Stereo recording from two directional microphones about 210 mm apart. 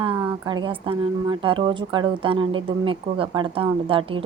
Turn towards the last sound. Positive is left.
turn(degrees=-25)  # may be behind; listen again after turning